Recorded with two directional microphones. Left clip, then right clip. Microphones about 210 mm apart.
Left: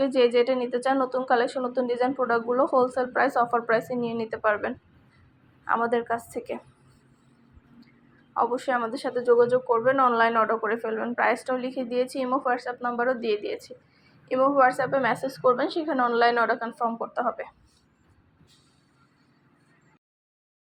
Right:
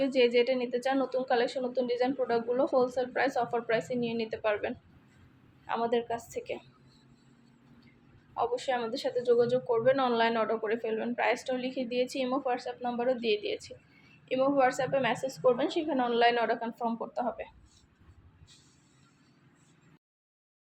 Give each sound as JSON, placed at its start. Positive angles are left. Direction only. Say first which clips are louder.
{"t": 0.0, "sound": "a woman's voice", "louder": "left 4 dB", "side_deg": 5}
{"t": 8.4, "sound": "speech", "louder": "left 6 dB", "side_deg": 5}
{"t": 14.3, "sound": "a woman's voice", "louder": "left 6 dB", "side_deg": 5}